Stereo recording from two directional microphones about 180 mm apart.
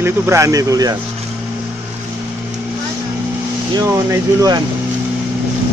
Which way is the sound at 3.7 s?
20° right (ahead or behind).